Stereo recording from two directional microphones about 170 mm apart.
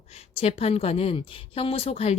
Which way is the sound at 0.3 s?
40° left (ahead or behind).